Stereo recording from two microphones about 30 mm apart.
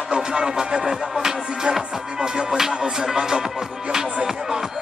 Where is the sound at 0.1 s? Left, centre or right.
Right.